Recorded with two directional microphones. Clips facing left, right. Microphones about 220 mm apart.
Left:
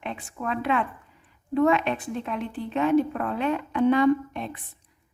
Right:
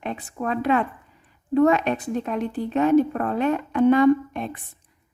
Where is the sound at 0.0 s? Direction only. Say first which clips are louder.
Right 4 dB; 40° right (ahead or behind).